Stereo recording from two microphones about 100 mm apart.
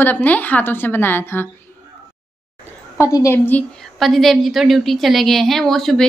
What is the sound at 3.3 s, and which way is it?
Speech, 20° left (ahead or behind).